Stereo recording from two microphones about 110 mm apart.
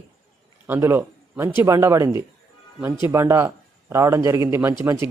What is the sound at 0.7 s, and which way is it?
Speech, 20° right (ahead or behind).